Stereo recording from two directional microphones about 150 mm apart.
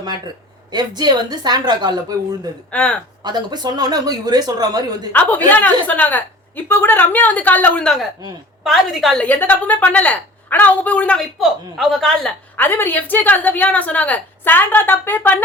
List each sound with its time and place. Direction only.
0.7 s speech: 30° right (ahead or behind)
2.7 s a woman's voice: 10° left (ahead or behind)
3.2 s speech: 30° right (ahead or behind)
5.5 s a woman's voice: 10° left (ahead or behind)
9.2 s a woman's voice: 10° left (ahead or behind)
12.5 s a woman's voice: 15° left (ahead or behind)